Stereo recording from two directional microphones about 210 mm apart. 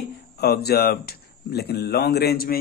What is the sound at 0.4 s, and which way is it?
Speech, 50° left (ahead or behind).